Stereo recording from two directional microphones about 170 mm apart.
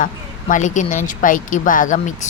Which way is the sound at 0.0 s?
50° left (ahead or behind).